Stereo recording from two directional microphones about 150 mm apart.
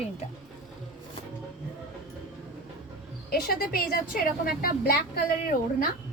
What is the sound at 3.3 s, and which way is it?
A woman's voice, 90° left.